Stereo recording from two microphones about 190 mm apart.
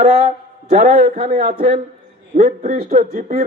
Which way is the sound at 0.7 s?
45° right (ahead or behind).